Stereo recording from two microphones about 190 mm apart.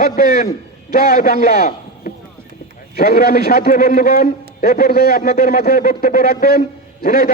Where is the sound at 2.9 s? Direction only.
55° left (ahead or behind).